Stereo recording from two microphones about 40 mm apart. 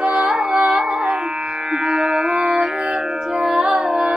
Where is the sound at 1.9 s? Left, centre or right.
Right.